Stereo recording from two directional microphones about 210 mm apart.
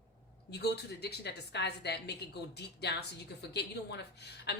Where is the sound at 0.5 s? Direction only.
50° left (ahead or behind).